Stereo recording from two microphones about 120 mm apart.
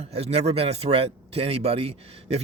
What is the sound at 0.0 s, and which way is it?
Speech, 60° right (ahead or behind).